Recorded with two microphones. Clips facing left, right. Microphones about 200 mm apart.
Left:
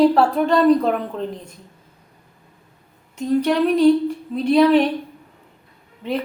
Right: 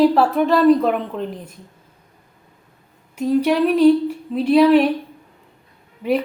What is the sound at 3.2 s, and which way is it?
A woman's voice, 5° right (ahead or behind).